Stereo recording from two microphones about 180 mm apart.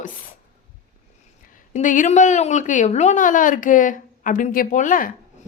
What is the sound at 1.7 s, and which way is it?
A woman's voice, 45° left (ahead or behind).